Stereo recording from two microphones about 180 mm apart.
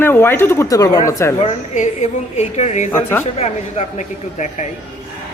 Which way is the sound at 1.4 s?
40° left (ahead or behind).